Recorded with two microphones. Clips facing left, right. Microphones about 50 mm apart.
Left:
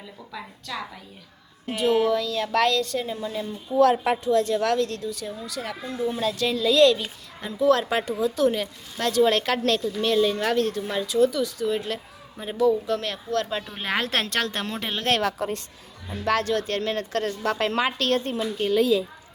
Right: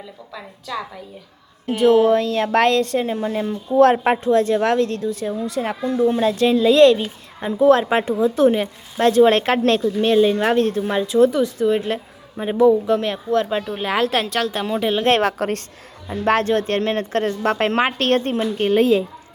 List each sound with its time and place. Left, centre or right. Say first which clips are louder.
0.7 s a woman's voice: right 5 dB; centre
1.6 s a woman's voice: right 7 dB; right
13.7 s speech: right 5 dB; centre
15.4 s a woman's voice: right 6 dB; right
16.2 s a woman's voice: right 6 dB; right